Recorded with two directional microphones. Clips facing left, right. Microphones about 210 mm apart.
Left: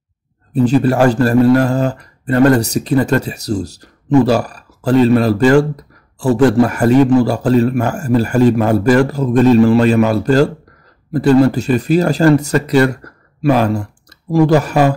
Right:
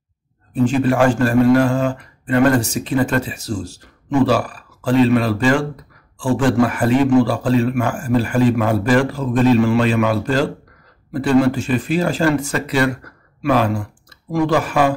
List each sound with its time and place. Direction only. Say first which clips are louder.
0.5 s speech: left 4 dB; 40° left (ahead or behind)